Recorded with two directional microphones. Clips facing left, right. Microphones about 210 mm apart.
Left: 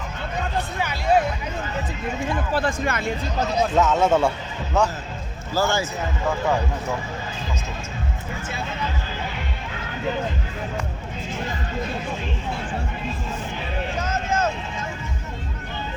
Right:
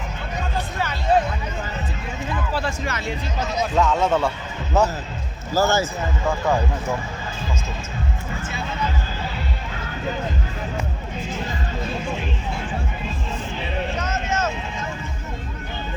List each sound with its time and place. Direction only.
1.1 s hubbub: 10° left (ahead or behind)
2.5 s speech: 50° left (ahead or behind)
3.8 s a man's voice: 5° left (ahead or behind)
5.5 s a man's voice: 45° right (ahead or behind)